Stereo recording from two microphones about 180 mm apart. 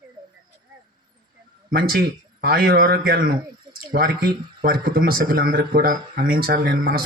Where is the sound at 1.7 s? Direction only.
60° right (ahead or behind).